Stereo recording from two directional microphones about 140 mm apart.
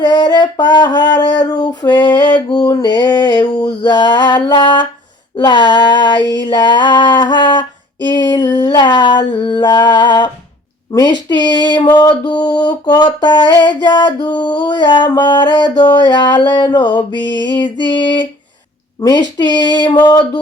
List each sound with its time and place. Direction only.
0.0 s a sound: 30° left (ahead or behind)
6.4 s female singing: 30° left (ahead or behind)
18.9 s speech: 25° left (ahead or behind)